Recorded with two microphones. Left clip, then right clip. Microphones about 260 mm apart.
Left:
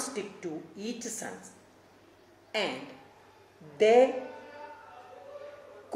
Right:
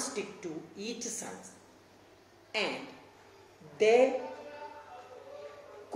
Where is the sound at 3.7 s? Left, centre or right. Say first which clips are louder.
Left 3 dB; left.